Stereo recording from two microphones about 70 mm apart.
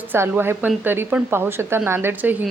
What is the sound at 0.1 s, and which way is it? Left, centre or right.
Speech, right.